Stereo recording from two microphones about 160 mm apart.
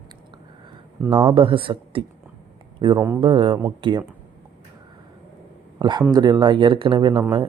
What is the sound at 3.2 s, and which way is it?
Speech, 35° right (ahead or behind).